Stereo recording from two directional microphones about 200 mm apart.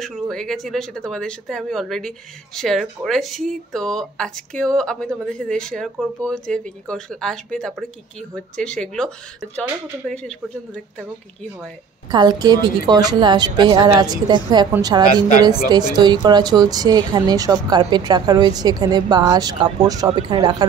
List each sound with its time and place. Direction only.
0.0 s speech: centre (ahead or behind)
12.1 s a woman's voice: 20° right (ahead or behind)